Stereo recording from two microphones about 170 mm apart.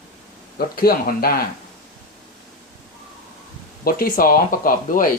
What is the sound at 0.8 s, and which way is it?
Speech, 60° left (ahead or behind).